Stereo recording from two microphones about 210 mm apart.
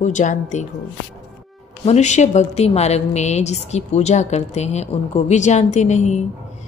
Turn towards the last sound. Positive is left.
turn(degrees=35)  # may be behind; listen again after turning